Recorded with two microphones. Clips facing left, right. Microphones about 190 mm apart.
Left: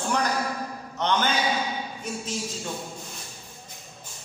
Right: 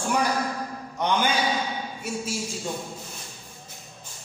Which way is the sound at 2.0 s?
10° right (ahead or behind).